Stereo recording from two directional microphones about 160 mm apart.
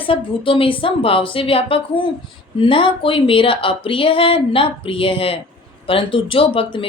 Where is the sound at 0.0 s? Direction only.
35° left (ahead or behind).